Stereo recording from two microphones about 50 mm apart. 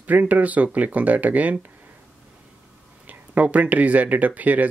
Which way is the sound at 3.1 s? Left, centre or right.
Right.